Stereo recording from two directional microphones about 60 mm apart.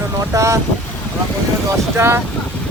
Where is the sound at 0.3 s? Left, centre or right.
Right.